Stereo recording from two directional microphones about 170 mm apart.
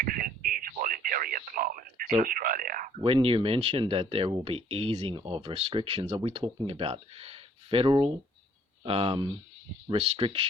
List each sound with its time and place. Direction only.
0.0 s radio: 55° right (ahead or behind)
2.2 s speech: 55° right (ahead or behind)
3.0 s speech: 30° right (ahead or behind)